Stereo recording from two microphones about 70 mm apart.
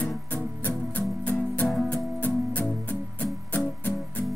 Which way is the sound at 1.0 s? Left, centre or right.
Left.